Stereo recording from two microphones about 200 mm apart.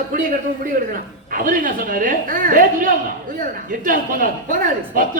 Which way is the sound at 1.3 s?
45° right (ahead or behind).